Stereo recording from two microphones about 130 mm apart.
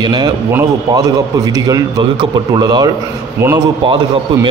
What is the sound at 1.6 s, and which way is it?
A man's voice, 25° right (ahead or behind).